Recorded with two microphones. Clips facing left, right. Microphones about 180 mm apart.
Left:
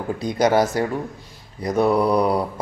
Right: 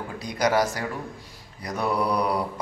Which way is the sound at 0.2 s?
25° left (ahead or behind).